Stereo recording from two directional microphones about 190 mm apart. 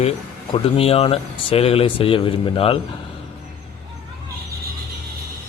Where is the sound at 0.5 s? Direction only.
30° left (ahead or behind).